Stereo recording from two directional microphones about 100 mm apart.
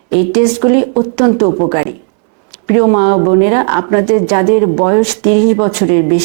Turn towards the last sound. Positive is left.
turn(degrees=-20)  # may be behind; listen again after turning